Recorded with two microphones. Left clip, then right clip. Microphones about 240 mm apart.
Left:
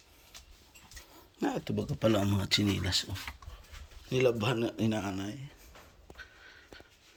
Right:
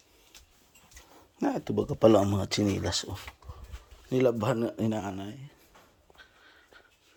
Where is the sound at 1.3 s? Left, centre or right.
Centre.